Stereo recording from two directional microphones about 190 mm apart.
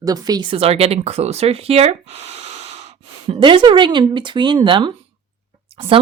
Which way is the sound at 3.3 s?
25° right (ahead or behind).